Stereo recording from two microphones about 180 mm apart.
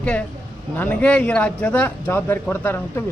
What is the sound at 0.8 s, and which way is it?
Speech, 10° left (ahead or behind).